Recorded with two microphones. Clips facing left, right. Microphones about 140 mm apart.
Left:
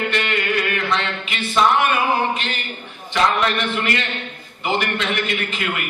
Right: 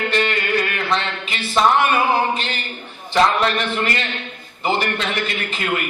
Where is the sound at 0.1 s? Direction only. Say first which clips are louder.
Right 2 dB; 35° right (ahead or behind).